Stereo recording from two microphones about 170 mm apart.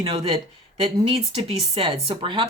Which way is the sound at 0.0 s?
30° right (ahead or behind).